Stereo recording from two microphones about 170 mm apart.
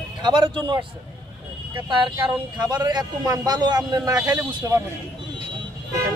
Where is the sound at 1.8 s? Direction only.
30° right (ahead or behind).